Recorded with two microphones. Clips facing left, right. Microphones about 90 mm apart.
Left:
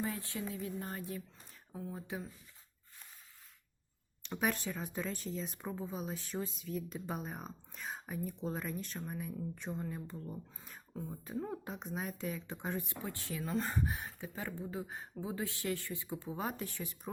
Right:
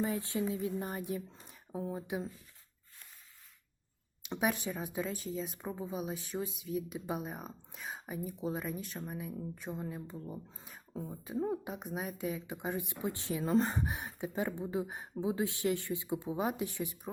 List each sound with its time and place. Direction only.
0.0 s speech: 20° right (ahead or behind)
4.4 s speech: 15° right (ahead or behind)